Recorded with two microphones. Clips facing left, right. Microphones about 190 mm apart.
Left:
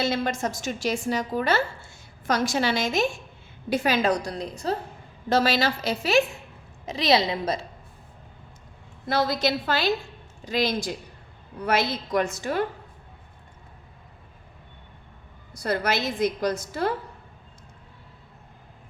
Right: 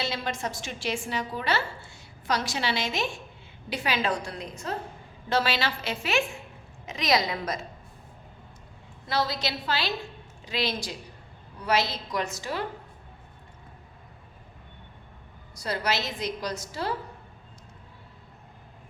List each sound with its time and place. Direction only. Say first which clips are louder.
0.0 s a woman's voice: left 6 dB; 45° left (ahead or behind); by 7.6 s 30° left (ahead or behind)
9.0 s a woman's voice: left 5 dB; 50° left (ahead or behind)
15.5 s a woman's voice: left 4 dB; 55° left (ahead or behind)